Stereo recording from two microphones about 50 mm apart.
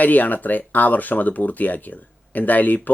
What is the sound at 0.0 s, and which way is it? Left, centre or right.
Speech, left.